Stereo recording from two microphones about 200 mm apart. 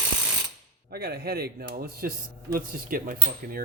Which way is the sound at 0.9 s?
50° right (ahead or behind).